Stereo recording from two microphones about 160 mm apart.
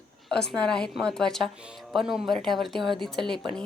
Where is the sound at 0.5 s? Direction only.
5° left (ahead or behind).